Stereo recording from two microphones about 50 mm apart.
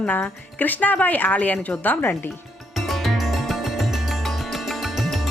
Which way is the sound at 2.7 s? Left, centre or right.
Centre.